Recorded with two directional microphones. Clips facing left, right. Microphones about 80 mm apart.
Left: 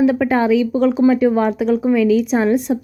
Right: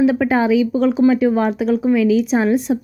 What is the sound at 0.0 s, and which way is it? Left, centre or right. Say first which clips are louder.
Speech: even; centre.